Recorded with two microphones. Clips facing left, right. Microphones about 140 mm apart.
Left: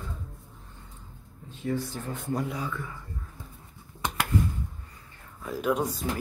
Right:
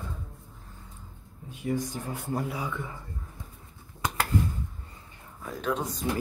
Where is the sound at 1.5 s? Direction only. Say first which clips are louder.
Even; 15° right (ahead or behind).